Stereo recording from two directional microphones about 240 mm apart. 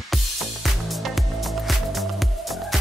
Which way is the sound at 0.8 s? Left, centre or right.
Centre.